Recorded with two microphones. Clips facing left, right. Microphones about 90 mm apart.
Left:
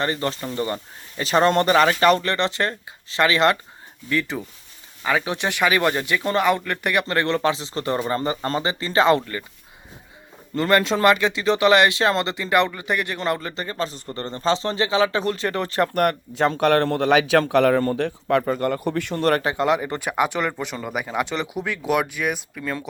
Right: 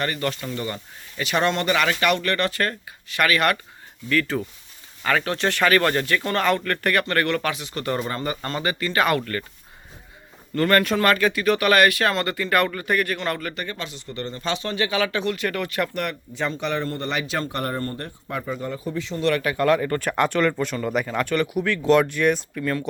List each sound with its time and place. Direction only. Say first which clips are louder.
0.0 s speech: left 2 dB; 25° left (ahead or behind)
10.5 s speech: even; 20° left (ahead or behind)
16.0 s speech: left 7 dB; 50° left (ahead or behind)
19.4 s speech: right 1 dB; 25° left (ahead or behind); by 22.9 s 5° left (ahead or behind)